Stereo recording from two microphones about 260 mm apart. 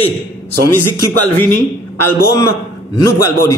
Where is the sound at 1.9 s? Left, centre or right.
Centre.